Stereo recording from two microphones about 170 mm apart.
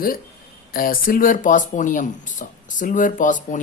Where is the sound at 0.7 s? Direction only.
60° left (ahead or behind).